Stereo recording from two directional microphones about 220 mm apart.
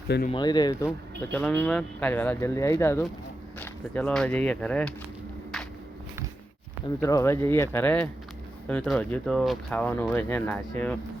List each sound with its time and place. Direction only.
0.3 s speech: 20° left (ahead or behind)
6.8 s speech: 15° left (ahead or behind)